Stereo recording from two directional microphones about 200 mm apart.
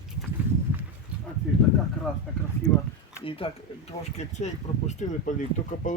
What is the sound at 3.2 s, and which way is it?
Speech, 25° left (ahead or behind).